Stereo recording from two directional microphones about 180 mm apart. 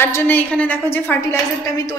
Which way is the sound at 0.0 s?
10° left (ahead or behind).